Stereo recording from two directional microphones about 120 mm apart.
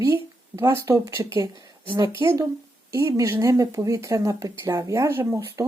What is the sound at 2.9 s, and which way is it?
Speech, 25° right (ahead or behind).